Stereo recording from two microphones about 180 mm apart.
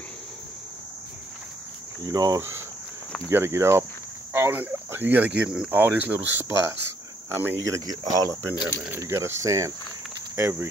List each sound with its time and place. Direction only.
2.0 s speech: 20° right (ahead or behind)